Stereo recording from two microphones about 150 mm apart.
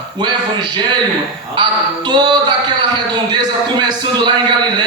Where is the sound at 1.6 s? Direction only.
30° right (ahead or behind).